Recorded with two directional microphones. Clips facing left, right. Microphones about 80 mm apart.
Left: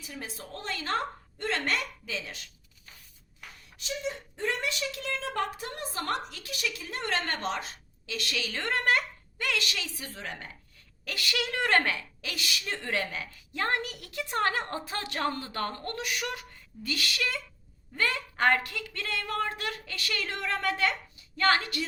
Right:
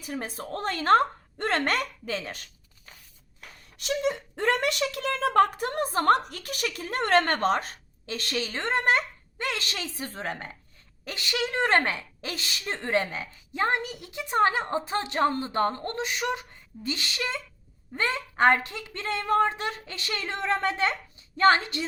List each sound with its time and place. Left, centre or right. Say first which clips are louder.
0.0 s a woman's voice: right 7 dB; right
3.8 s a woman's voice: right 7 dB; right
11.0 s a woman's voice: right 2 dB; right